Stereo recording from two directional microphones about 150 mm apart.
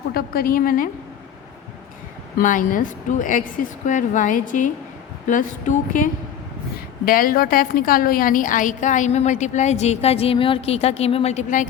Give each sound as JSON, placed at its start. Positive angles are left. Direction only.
{"t": 0.1, "sound": "a woman's voice", "side_deg": 80}
{"t": 2.4, "sound": "a woman's voice", "side_deg": 60}
{"t": 7.0, "sound": "a woman's voice", "side_deg": 70}